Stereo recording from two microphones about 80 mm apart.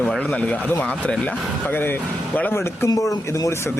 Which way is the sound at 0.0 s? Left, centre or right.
Centre.